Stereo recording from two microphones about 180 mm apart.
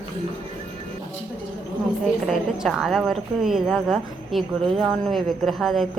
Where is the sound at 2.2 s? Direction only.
Centre (ahead or behind).